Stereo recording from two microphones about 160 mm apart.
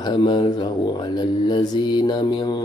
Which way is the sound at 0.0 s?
30° left (ahead or behind).